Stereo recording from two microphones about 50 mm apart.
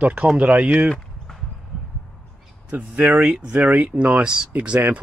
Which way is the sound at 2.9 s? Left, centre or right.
Right.